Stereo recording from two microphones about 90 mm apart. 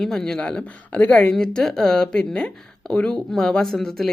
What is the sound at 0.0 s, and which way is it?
Speech, 5° left (ahead or behind).